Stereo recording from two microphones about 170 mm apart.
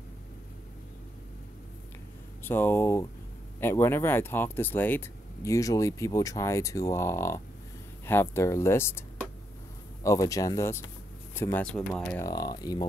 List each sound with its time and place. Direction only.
2.4 s speech: 10° left (ahead or behind)
10.0 s speech: 20° left (ahead or behind)
12.2 s speech: 20° left (ahead or behind)